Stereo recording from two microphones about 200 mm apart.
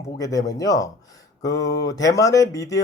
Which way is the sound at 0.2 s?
15° left (ahead or behind).